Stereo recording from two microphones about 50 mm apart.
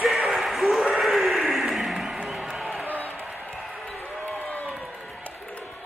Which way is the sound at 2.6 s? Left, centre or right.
Centre.